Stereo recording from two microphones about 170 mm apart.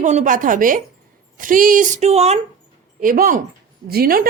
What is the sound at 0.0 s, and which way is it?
A woman's voice, 45° right (ahead or behind).